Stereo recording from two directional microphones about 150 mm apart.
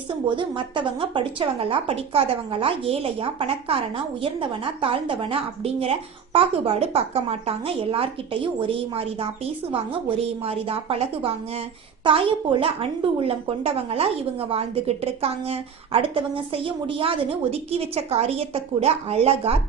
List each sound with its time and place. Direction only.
0.3 s a woman's voice: 30° right (ahead or behind)